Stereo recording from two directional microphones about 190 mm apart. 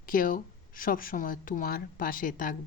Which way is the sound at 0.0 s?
45° left (ahead or behind).